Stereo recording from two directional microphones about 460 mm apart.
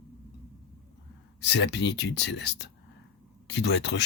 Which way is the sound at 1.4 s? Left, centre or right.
Left.